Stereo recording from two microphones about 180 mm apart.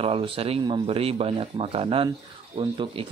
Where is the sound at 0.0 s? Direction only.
30° right (ahead or behind).